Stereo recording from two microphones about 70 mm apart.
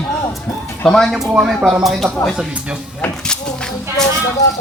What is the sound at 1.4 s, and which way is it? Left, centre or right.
Speech, centre.